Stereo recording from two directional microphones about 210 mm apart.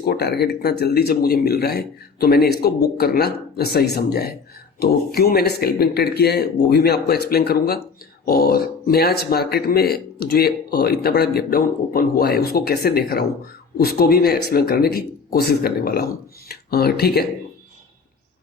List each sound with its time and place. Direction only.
0.0 s speech: 50° left (ahead or behind)